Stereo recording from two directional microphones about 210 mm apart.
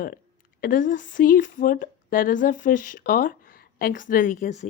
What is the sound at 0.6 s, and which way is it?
Speech, 40° left (ahead or behind).